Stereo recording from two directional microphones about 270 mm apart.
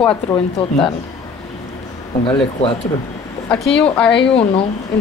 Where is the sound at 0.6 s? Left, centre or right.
Centre.